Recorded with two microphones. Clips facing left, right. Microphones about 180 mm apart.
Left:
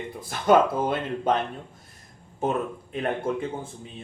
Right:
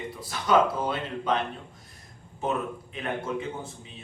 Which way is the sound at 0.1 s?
50° left (ahead or behind).